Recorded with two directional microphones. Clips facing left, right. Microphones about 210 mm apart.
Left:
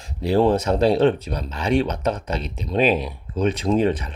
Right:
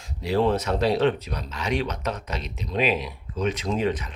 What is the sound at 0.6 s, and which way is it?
Speech, 30° left (ahead or behind).